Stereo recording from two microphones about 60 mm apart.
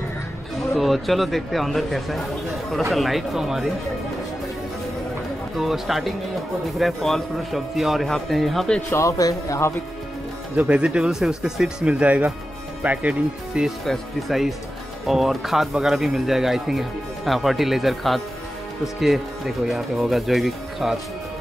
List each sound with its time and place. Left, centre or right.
0.7 s speech: centre
5.6 s speech: centre
8.9 s a man's voice: left
10.7 s speech: centre
11.9 s speech: right
13.8 s speech: centre